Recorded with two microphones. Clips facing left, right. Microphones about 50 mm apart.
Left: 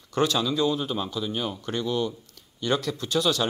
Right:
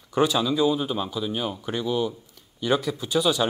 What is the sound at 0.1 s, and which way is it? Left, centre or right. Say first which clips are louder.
Speech: right 2 dB; centre.